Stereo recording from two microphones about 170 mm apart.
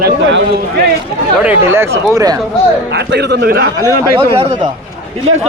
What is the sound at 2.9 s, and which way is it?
Speech, 80° right.